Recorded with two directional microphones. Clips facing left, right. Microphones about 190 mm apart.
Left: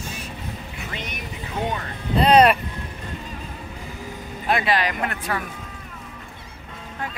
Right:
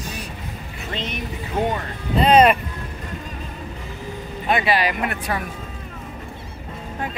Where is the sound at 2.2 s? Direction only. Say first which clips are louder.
Right 1 dB; 5° right (ahead or behind).